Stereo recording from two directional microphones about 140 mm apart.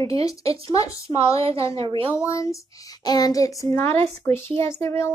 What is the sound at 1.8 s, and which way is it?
Speech, 40° right (ahead or behind).